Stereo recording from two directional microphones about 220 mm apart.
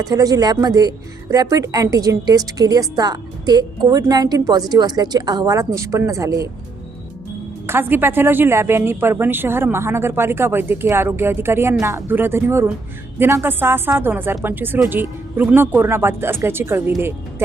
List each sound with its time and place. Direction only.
0.0 s a woman's voice: 15° right (ahead or behind)
7.7 s a woman's voice: 10° right (ahead or behind)